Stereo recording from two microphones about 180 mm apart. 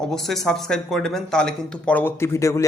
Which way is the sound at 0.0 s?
Centre (ahead or behind).